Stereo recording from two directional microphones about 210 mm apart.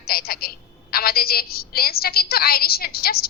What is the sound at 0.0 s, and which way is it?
A woman's voice, 45° left (ahead or behind).